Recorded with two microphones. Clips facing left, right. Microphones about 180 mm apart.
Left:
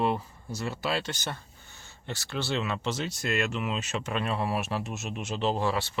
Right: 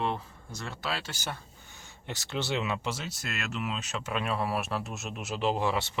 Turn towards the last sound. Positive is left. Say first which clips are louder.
# left 1 dB
turn(degrees=-20)  # may be behind; listen again after turning